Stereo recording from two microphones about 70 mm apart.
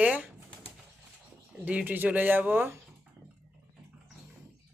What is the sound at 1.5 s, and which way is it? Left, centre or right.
Speech, centre.